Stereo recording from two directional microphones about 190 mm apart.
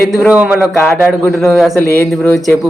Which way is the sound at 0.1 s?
5° right (ahead or behind).